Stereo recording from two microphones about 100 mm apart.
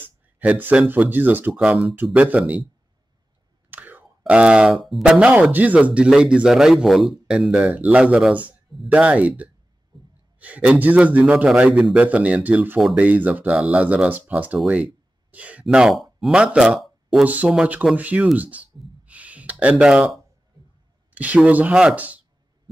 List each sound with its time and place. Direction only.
0.0 s speech: 20° right (ahead or behind)
3.7 s a sound: 15° right (ahead or behind)
4.2 s speech: 10° right (ahead or behind)
9.9 s gasp: 50° right (ahead or behind)
10.4 s speech: 15° right (ahead or behind)
17.2 s speech: 15° right (ahead or behind)
19.0 s a sound: 15° right (ahead or behind)
21.1 s speech: 15° right (ahead or behind)